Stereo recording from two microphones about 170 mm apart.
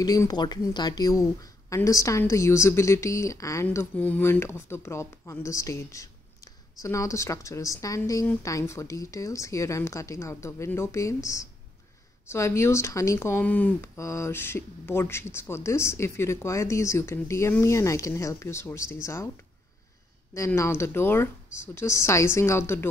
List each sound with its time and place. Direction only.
0.0 s speech: 20° left (ahead or behind)
20.3 s speech: 15° left (ahead or behind)